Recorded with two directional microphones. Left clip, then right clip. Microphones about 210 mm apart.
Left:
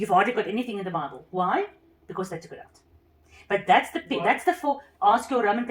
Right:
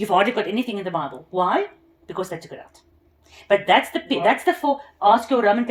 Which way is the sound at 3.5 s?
35° right (ahead or behind).